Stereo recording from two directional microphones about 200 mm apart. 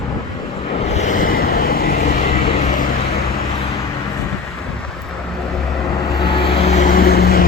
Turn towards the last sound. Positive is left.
turn(degrees=50)  # may be behind; listen again after turning